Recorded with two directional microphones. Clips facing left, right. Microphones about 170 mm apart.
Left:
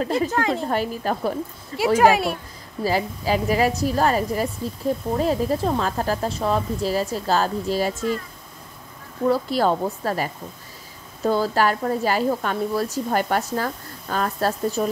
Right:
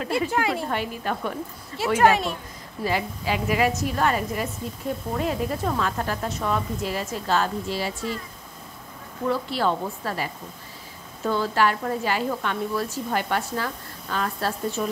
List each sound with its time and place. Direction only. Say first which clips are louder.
0.0 s a woman's voice: left 2 dB; 35° left (ahead or behind)
2.0 s speech: left 2 dB; 10° left (ahead or behind)
2.8 s a woman's voice: left 3 dB; 35° left (ahead or behind)
9.3 s a woman's voice: left 4 dB; 40° left (ahead or behind)